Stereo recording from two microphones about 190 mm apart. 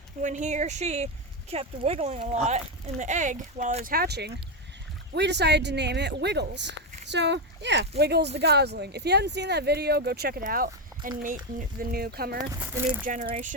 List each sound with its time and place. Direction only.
0.2 s speech: 40° right (ahead or behind)
3.9 s speech: 55° right (ahead or behind)
12.5 s speech: 10° right (ahead or behind)